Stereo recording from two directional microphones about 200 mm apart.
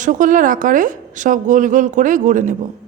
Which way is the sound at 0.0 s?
40° right (ahead or behind).